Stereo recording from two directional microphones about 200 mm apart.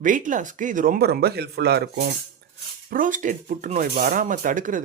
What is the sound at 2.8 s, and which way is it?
Speech, 45° right (ahead or behind).